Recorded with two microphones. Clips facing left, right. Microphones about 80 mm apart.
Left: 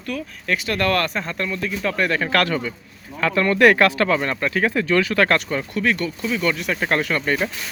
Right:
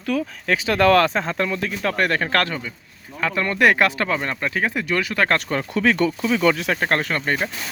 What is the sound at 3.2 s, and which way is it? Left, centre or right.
Speech, centre.